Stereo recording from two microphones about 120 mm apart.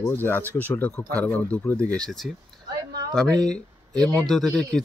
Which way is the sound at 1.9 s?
5° left (ahead or behind).